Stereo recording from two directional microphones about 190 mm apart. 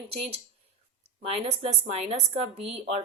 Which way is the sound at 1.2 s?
30° right (ahead or behind).